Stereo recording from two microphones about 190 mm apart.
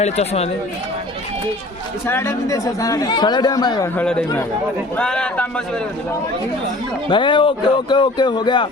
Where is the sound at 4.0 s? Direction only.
5° left (ahead or behind).